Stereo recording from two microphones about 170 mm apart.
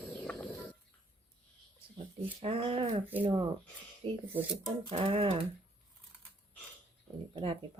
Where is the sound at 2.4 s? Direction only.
35° right (ahead or behind).